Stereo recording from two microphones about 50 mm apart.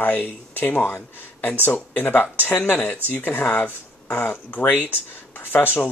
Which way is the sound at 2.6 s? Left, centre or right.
Left.